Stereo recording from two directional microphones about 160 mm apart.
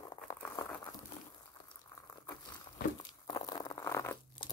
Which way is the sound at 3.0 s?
25° left (ahead or behind).